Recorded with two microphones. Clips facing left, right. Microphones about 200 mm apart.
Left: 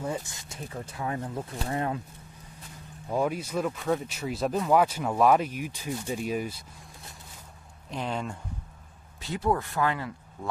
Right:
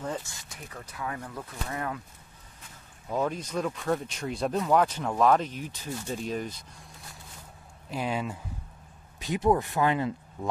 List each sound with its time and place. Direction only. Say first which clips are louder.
0.0 s speech: left 2 dB; 10° left (ahead or behind)
0.5 s speech: left 5 dB; 25° left (ahead or behind)
3.1 s speech: left 2 dB; 10° left (ahead or behind)
7.9 s speech: right 1 dB; 5° right (ahead or behind)
9.2 s speech: right 3 dB; 20° right (ahead or behind)